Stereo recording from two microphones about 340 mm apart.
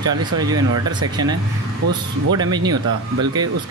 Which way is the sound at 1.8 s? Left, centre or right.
Right.